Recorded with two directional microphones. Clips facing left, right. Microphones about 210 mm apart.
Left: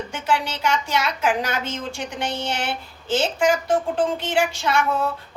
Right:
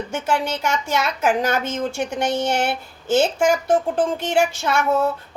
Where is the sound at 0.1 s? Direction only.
45° right (ahead or behind).